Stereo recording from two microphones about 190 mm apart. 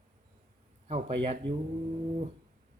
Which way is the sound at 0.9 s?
35° right (ahead or behind).